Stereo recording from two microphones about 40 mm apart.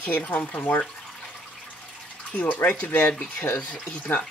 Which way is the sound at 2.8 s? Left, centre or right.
Left.